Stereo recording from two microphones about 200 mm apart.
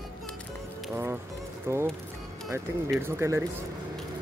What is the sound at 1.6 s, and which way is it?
Speech, 10° right (ahead or behind).